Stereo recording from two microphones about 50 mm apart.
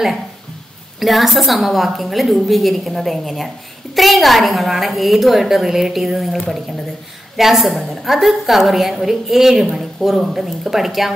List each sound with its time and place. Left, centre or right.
0.9 s a woman's voice: centre